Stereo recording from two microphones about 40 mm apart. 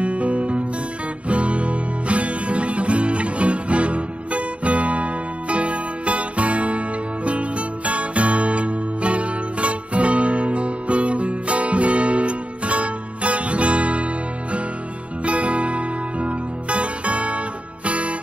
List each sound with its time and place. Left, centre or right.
0.0 s music: right
15.2 s music: right